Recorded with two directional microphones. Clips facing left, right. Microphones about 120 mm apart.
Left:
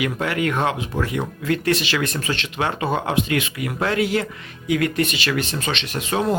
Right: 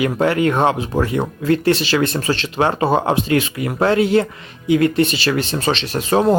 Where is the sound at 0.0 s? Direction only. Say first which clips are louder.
Right 6 dB; 30° right (ahead or behind).